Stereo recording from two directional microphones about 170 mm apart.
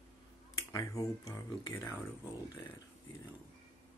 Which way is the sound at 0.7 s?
20° left (ahead or behind).